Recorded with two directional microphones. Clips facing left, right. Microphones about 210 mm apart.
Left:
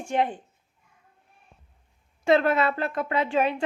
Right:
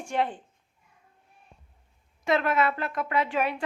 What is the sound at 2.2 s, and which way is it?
A woman's voice, 30° left (ahead or behind).